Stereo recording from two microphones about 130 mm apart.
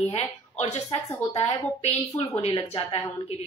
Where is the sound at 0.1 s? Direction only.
55° left (ahead or behind).